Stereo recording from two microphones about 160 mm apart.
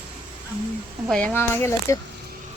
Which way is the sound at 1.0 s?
5° left (ahead or behind).